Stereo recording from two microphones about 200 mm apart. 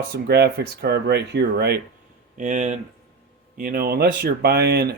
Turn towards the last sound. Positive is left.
turn(degrees=-55)  # may be behind; listen again after turning